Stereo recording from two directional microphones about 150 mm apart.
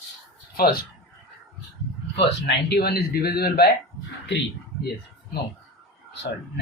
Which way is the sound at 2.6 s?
90° left.